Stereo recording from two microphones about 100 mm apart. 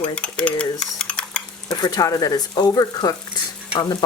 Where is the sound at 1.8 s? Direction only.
40° left (ahead or behind).